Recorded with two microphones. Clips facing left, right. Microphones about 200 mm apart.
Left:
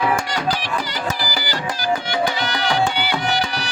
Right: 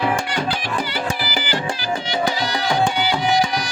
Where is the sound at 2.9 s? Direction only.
60° left (ahead or behind).